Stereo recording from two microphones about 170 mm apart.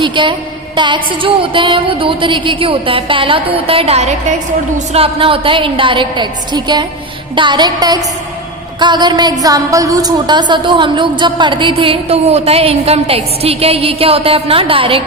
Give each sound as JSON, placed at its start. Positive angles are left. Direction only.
{"t": 0.0, "sound": "a woman's voice", "side_deg": -30}